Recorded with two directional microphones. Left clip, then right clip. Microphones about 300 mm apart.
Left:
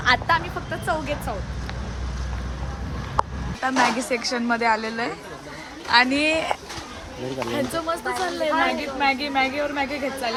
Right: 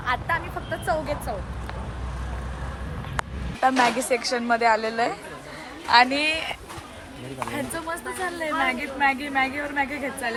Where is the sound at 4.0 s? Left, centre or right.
Centre.